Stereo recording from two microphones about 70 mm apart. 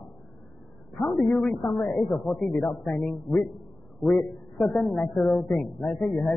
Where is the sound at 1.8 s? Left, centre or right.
Centre.